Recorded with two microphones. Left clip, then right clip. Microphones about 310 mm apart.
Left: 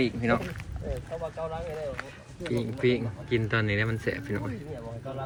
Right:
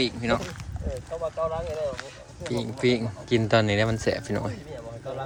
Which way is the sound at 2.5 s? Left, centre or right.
Centre.